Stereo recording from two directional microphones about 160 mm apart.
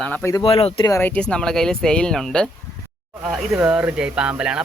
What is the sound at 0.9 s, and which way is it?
Speech, 15° left (ahead or behind).